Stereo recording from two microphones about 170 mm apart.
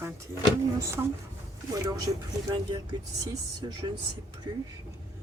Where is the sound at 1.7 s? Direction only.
20° right (ahead or behind).